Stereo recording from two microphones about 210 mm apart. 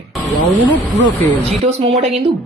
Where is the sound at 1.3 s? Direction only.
25° right (ahead or behind).